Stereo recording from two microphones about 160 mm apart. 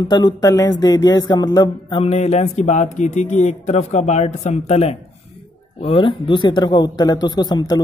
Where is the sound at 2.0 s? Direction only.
45° left (ahead or behind).